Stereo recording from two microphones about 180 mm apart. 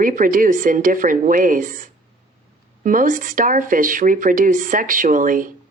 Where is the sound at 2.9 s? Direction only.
50° right (ahead or behind).